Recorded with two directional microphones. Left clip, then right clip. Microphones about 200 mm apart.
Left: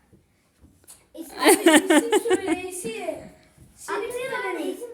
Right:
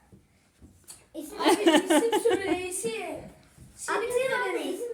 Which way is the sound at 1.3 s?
40° left (ahead or behind).